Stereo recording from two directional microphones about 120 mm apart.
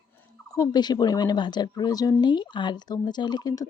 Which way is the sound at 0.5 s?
35° left (ahead or behind).